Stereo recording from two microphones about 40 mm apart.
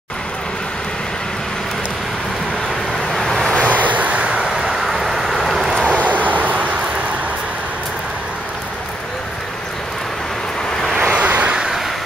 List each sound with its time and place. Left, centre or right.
3.1 s vehicle: centre
3.6 s vehicle: right
4.4 s vehicle: centre
5.9 s vehicle: right
11.0 s vehicle: right